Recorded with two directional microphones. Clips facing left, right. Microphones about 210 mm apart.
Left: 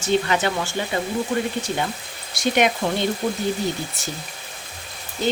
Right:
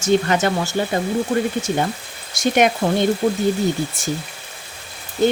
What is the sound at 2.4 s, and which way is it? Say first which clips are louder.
Speech: right 3 dB; 50° right (ahead or behind).